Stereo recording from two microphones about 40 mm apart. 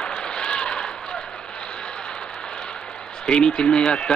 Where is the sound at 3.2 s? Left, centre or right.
Left.